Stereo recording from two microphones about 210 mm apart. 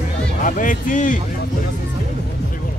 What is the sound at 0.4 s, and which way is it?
Speech, 40° left (ahead or behind).